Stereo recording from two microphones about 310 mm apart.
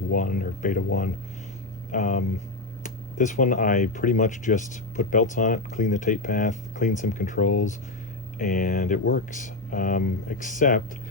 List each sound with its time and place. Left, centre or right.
0.1 s speech: left